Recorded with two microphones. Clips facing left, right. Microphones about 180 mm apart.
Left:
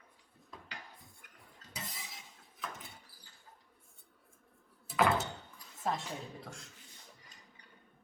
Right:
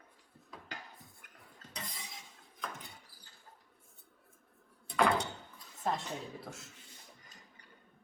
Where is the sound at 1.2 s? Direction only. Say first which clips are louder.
Right 1 dB; 50° right (ahead or behind).